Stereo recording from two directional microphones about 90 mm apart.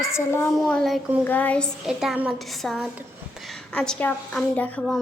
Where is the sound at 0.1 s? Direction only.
30° left (ahead or behind).